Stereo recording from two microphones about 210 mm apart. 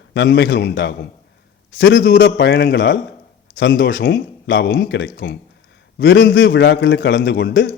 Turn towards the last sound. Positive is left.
turn(degrees=55)  # may be behind; listen again after turning